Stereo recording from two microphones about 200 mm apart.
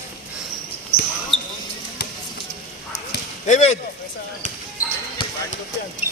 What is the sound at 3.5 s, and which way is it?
Speech, 35° left (ahead or behind).